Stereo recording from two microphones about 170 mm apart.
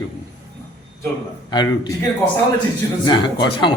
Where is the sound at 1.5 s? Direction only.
25° left (ahead or behind).